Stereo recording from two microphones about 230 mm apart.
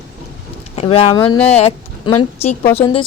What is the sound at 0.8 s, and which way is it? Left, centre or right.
A woman's voice, left.